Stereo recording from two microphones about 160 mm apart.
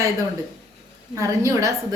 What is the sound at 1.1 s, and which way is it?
Speech, 20° right (ahead or behind).